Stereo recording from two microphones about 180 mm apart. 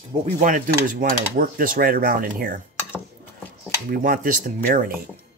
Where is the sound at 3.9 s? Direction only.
50° right (ahead or behind).